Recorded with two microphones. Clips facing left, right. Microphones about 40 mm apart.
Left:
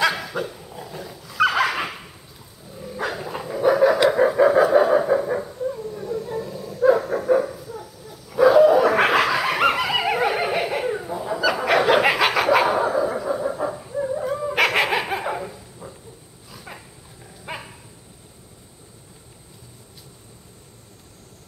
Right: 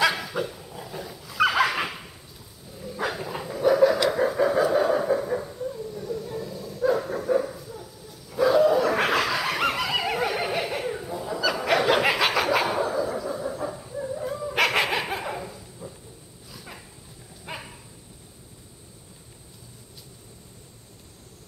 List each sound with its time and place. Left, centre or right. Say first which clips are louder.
0.0 s dog: left 2 dB; centre
12.8 s dog: left 5 dB; left
14.5 s dog: left 3 dB; centre
15.8 s a sound: left 1 dB; left
16.5 s dog: left 4 dB; centre